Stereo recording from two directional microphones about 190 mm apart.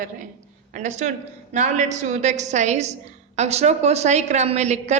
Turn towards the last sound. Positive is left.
turn(degrees=-35)  # may be behind; listen again after turning